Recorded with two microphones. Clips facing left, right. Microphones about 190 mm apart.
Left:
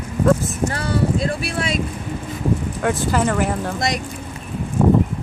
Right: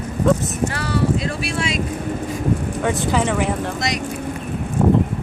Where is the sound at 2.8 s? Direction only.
Centre (ahead or behind).